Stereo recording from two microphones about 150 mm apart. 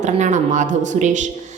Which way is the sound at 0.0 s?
55° right (ahead or behind).